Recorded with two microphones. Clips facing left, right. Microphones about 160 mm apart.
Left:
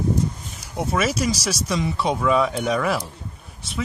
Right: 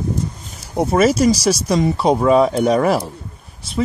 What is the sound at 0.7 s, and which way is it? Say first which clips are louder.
Speech: right 8 dB; 40° right (ahead or behind).